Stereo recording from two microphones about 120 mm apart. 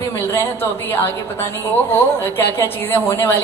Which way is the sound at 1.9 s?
15° left (ahead or behind).